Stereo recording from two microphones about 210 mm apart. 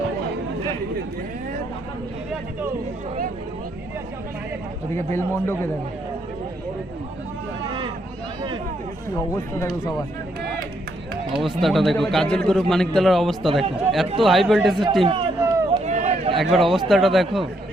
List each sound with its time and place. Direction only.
5.1 s speech: 10° left (ahead or behind)
9.1 s speech: 15° left (ahead or behind)
11.4 s a man's voice: centre (ahead or behind)
15.0 s speech: 30° right (ahead or behind)
15.4 s run: 15° right (ahead or behind)
15.7 s a sound: 30° right (ahead or behind)
16.3 s a man's voice: centre (ahead or behind)